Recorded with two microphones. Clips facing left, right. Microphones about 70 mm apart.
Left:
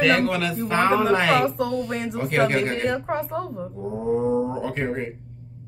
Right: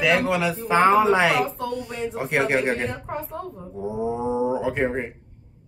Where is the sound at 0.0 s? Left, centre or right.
Centre.